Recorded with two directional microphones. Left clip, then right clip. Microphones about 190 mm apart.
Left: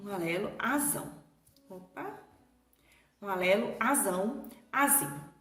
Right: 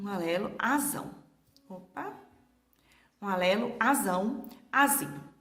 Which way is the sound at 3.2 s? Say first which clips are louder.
Right 1 dB; 40° right (ahead or behind).